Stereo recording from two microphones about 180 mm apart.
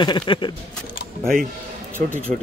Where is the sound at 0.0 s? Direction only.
25° left (ahead or behind).